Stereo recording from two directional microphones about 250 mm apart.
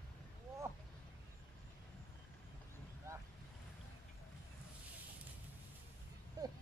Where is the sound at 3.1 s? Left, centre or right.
Centre.